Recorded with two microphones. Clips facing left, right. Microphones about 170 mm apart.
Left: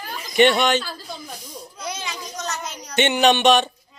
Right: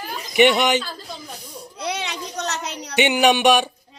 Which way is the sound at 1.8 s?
65° right (ahead or behind).